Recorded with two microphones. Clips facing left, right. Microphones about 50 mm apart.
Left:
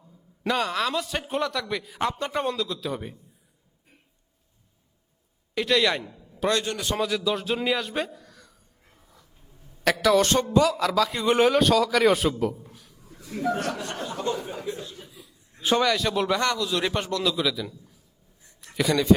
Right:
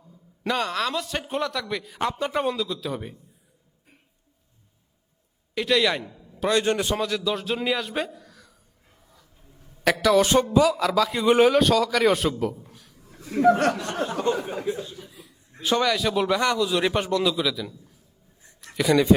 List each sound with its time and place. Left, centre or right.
0.4 s a man's voice: centre
5.5 s a man's voice: centre
6.6 s a man's voice: right
6.9 s a man's voice: centre
9.8 s a man's voice: centre
12.7 s a sound: centre
13.4 s speech: right
15.0 s chuckle: right
15.7 s a man's voice: centre
17.3 s a man's voice: centre
18.6 s a sound: centre